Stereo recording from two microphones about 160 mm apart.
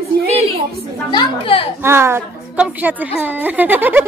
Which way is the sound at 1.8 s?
15° right (ahead or behind).